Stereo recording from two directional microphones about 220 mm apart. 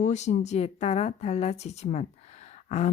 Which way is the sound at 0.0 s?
30° left (ahead or behind).